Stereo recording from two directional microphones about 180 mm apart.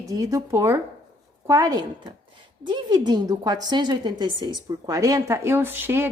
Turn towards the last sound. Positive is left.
turn(degrees=-10)  # may be behind; listen again after turning